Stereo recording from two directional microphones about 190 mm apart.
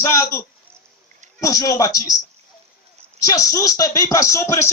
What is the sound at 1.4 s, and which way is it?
Speech, 20° left (ahead or behind).